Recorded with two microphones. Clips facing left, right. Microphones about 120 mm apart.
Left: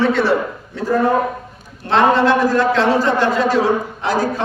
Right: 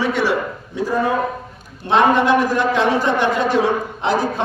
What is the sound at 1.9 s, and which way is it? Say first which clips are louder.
A man's voice: left 1 dB; 15° right (ahead or behind).